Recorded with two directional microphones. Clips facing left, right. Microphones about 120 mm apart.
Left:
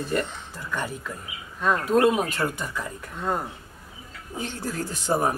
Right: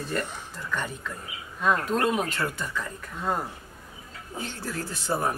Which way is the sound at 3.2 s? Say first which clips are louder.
Left 1 dB; centre (ahead or behind).